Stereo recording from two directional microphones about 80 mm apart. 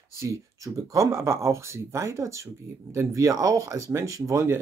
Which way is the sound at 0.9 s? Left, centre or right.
Right.